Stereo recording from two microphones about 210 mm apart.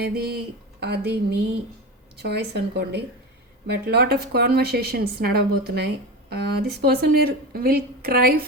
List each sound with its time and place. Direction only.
0.0 s speech: 50° right (ahead or behind)